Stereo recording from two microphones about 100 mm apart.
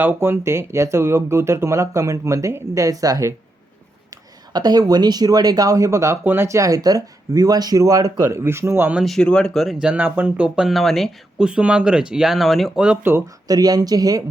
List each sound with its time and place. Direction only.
0.0 s speech: 25° right (ahead or behind)
8.2 s speech: 25° right (ahead or behind)
9.0 s speech: 5° left (ahead or behind)
9.8 s speech: 15° right (ahead or behind); by 11.1 s centre (ahead or behind)
11.3 s speech: 10° right (ahead or behind)
13.2 s speech: 40° right (ahead or behind)